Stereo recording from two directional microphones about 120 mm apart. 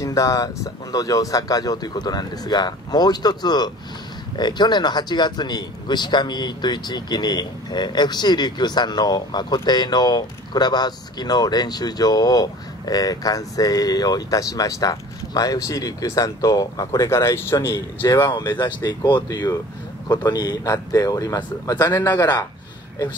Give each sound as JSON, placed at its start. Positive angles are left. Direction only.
{"t": 0.0, "sound": "speech", "side_deg": 25}
{"t": 17.7, "sound": "speech", "side_deg": 35}